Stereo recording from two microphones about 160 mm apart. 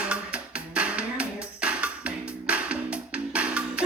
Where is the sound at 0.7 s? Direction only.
5° right (ahead or behind).